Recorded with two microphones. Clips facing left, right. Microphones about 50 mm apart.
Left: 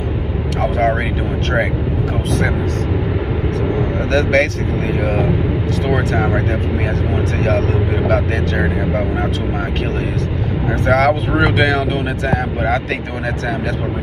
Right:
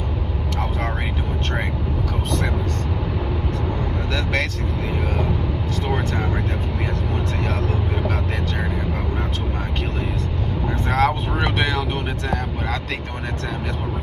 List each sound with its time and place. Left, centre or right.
0.6 s vehicle: left
4.1 s speech: left
5.9 s speech: left
8.1 s speech: left
10.9 s speech: left